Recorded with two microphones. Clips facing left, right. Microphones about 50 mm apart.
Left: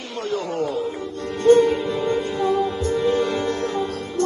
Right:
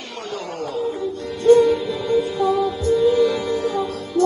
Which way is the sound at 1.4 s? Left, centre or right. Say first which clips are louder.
Right 1 dB; left.